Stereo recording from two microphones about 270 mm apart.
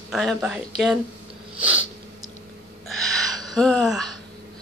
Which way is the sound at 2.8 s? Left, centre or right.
Left.